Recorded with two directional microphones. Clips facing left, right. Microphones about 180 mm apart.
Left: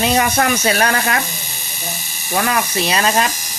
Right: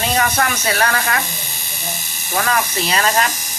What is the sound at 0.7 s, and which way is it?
Speech, 20° left (ahead or behind).